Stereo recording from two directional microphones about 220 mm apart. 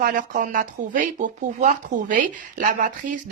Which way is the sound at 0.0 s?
40° right (ahead or behind).